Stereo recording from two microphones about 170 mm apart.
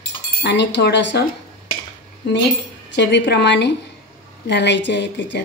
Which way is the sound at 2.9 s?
90° left.